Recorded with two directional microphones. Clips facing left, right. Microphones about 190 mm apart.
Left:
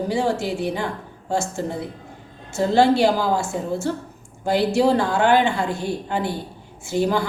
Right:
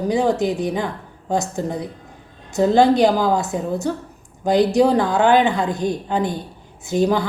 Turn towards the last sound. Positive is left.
turn(degrees=-20)  # may be behind; listen again after turning